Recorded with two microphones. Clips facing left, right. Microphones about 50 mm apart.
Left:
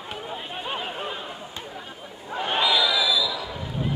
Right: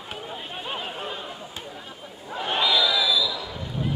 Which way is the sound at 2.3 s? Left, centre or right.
Centre.